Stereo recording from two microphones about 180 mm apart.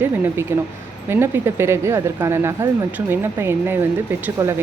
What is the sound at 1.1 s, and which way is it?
Speech, 15° right (ahead or behind).